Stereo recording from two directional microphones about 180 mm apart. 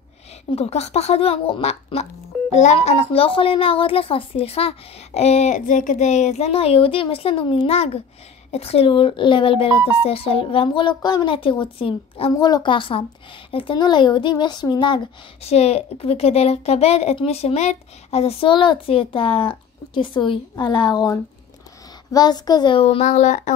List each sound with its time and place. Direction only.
0.5 s a woman's voice: 35° left (ahead or behind)
15.4 s a woman's voice: 35° left (ahead or behind)